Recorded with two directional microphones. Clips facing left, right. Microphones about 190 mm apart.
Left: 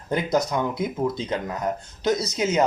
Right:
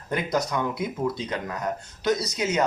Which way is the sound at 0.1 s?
20° left (ahead or behind).